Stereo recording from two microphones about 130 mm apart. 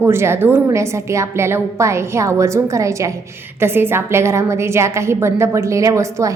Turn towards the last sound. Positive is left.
turn(degrees=-25)  # may be behind; listen again after turning